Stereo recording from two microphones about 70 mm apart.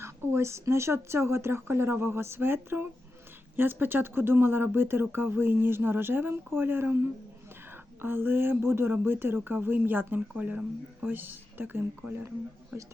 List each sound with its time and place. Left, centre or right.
0.0 s speech: right